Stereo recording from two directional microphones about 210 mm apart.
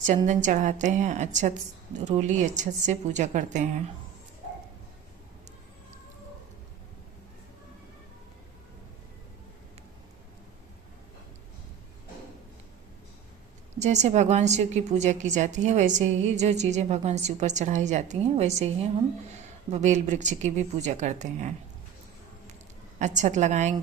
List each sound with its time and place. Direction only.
0.0 s a woman's voice: 35° right (ahead or behind)
13.7 s a woman's voice: 35° right (ahead or behind)
23.0 s a woman's voice: 35° right (ahead or behind)